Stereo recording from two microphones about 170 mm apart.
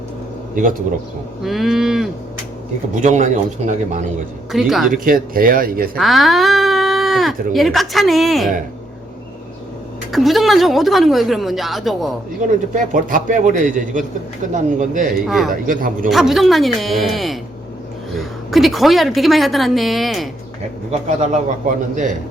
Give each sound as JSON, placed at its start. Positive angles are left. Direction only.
{"t": 0.5, "sound": "a man's voice", "side_deg": -55}
{"t": 1.4, "sound": "a woman's voice", "side_deg": 0}
{"t": 2.9, "sound": "a man's voice", "side_deg": -45}
{"t": 4.5, "sound": "a woman's voice", "side_deg": 0}
{"t": 4.9, "sound": "speech", "side_deg": -55}
{"t": 6.0, "sound": "a sound", "side_deg": 0}
{"t": 7.5, "sound": "a woman's voice", "side_deg": 0}
{"t": 10.1, "sound": "a woman's voice", "side_deg": 0}
{"t": 12.7, "sound": "a man's voice", "side_deg": -50}
{"t": 15.3, "sound": "a woman's voice", "side_deg": 0}
{"t": 15.6, "sound": "speech", "side_deg": -55}
{"t": 16.0, "sound": "a woman's voice", "side_deg": 0}
{"t": 18.5, "sound": "a woman's voice", "side_deg": 0}
{"t": 20.9, "sound": "a man's voice", "side_deg": -40}